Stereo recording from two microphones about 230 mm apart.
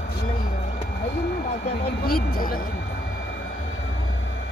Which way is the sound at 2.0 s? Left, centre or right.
Left.